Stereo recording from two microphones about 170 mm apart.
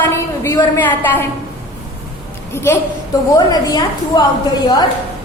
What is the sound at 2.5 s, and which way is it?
A woman's voice, 15° left (ahead or behind).